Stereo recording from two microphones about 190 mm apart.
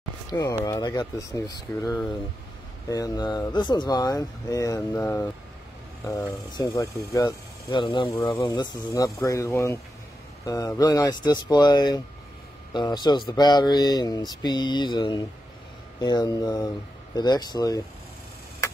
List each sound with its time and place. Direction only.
0.3 s speech: 20° left (ahead or behind)